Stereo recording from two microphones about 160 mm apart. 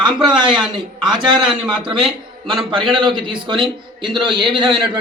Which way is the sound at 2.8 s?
30° right (ahead or behind).